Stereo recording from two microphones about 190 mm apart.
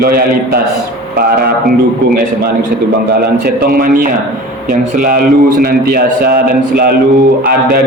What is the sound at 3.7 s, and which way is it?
A man's voice, 50° right (ahead or behind).